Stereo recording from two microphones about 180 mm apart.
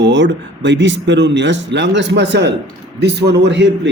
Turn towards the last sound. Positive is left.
turn(degrees=-80)